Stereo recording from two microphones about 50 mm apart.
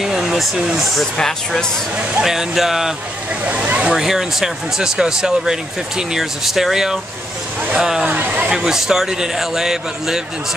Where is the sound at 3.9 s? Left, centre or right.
Centre.